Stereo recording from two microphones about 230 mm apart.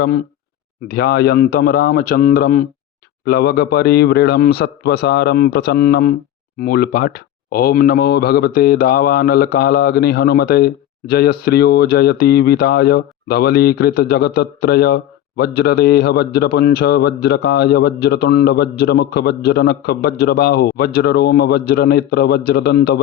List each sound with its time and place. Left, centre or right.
0.9 s speech: left